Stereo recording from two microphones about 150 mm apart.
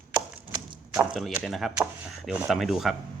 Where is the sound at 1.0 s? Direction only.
5° right (ahead or behind).